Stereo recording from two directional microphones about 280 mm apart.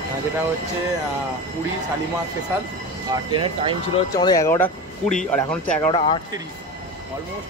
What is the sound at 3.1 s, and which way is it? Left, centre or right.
Speech, centre.